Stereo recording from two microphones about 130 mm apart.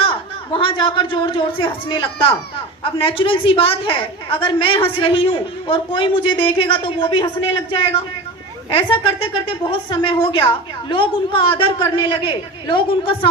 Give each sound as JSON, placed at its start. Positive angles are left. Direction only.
{"t": 0.0, "sound": "a woman's voice", "side_deg": 40}